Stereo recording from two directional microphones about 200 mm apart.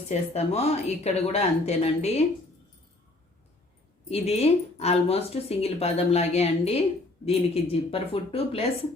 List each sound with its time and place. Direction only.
0.1 s speech: 30° left (ahead or behind)
4.1 s speech: 30° left (ahead or behind)